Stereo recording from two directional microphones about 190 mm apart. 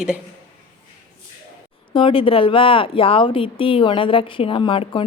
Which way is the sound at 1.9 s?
30° left (ahead or behind).